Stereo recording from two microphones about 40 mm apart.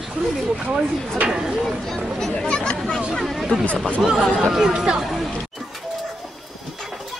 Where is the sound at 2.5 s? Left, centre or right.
Left.